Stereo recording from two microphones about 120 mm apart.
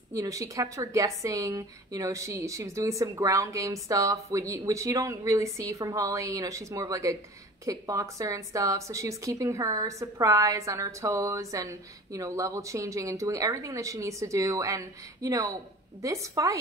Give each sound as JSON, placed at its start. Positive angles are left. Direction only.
{"t": 0.1, "sound": "a woman's voice", "side_deg": -25}